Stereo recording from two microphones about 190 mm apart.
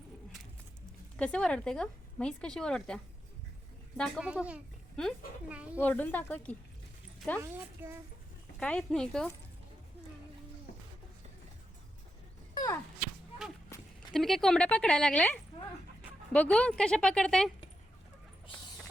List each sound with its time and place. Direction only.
1.1 s speech: 5° left (ahead or behind)
4.3 s a child's voice: 5° right (ahead or behind)
5.8 s speech: 10° left (ahead or behind)
7.5 s a child's voice: 10° right (ahead or behind)
8.5 s speech: 5° left (ahead or behind)
10.7 s a sound: 50° left (ahead or behind)
12.5 s whip: 15° left (ahead or behind)
14.1 s speech: centre (ahead or behind)